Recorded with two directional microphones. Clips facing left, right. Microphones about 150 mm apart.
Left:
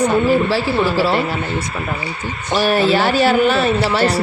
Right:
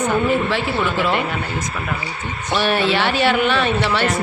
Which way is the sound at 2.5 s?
40° left (ahead or behind).